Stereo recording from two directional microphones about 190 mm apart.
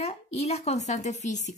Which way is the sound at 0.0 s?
35° left (ahead or behind).